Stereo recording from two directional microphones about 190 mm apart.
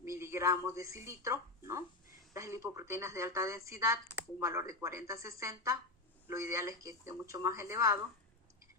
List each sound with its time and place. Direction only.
0.0 s speech: 15° right (ahead or behind)